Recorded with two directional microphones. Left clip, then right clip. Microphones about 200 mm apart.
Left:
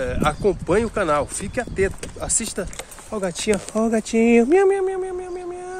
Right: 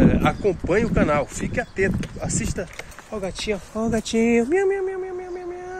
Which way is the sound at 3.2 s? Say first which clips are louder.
Left 5 dB; 45° left (ahead or behind).